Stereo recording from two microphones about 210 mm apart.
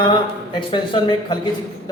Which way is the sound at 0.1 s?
25° left (ahead or behind).